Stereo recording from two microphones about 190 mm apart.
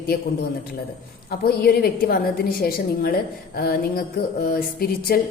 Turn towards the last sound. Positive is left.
turn(degrees=50)  # may be behind; listen again after turning